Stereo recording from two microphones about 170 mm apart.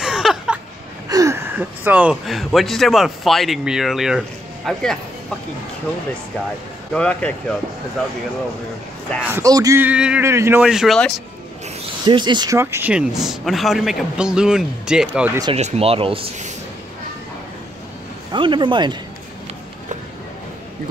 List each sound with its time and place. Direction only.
0.0 s a sound: 5° right (ahead or behind)
1.0 s speech: 20° right (ahead or behind); by 4.8 s centre (ahead or behind)
6.9 s speech: 5° left (ahead or behind)
9.2 s speech: 15° right (ahead or behind)
10.6 s speech: centre (ahead or behind)
12.0 s speech: 25° right (ahead or behind)
12.5 s speech: 10° right (ahead or behind)
15.5 s speech: 40° right (ahead or behind)
18.3 s speech: 30° right (ahead or behind)